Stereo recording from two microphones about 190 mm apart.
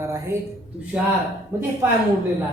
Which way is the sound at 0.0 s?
15° right (ahead or behind).